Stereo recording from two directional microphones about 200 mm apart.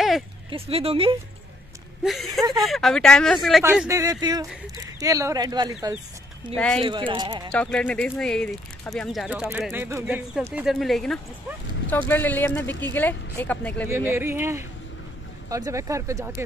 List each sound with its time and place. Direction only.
0.5 s speech: 30° right (ahead or behind)
2.0 s speech: centre (ahead or behind); by 5.9 s 15° right (ahead or behind)
6.5 s speech: 5° left (ahead or behind)
6.8 s speech: 25° right (ahead or behind)
7.5 s speech: 5° left (ahead or behind)
13.8 s speech: 10° right (ahead or behind)